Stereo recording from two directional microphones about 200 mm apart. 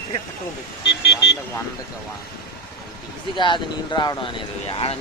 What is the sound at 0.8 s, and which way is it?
Speech, 60° left (ahead or behind).